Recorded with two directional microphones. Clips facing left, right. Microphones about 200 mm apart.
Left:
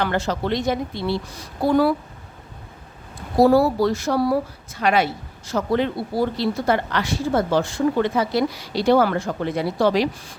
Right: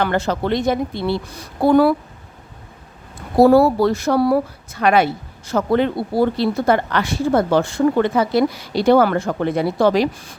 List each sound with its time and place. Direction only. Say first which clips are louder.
0.0 s speech: right 3 dB; 55° right (ahead or behind)
3.3 s speech: right 4 dB; 55° right (ahead or behind)